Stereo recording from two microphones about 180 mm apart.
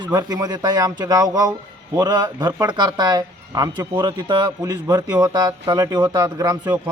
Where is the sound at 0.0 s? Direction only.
20° right (ahead or behind).